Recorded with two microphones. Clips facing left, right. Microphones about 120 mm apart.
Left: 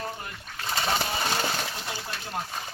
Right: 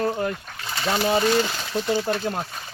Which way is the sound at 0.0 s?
70° right (ahead or behind).